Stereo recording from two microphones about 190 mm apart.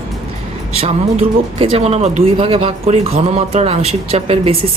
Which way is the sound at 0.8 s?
30° right (ahead or behind).